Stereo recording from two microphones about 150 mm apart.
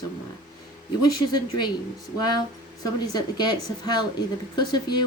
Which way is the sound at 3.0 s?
25° left (ahead or behind).